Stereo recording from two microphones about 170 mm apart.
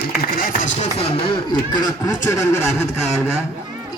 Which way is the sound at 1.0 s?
30° left (ahead or behind).